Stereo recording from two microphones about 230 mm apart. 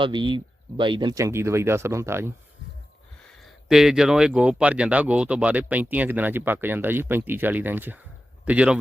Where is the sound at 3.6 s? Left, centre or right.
Centre.